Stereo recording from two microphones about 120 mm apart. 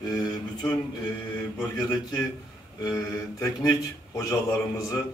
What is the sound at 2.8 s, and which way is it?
Mantra, 30° left (ahead or behind).